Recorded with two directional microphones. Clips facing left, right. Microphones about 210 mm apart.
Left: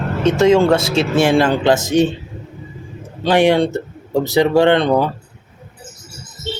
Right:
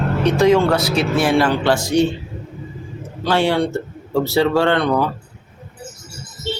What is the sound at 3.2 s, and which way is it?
Speech, 15° left (ahead or behind).